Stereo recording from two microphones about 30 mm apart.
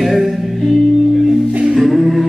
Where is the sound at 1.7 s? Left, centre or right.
Centre.